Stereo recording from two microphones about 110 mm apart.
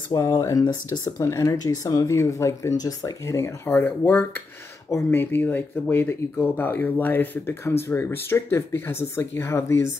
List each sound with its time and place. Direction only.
0.3 s speech: 30° left (ahead or behind)
1.2 s speech: 25° left (ahead or behind)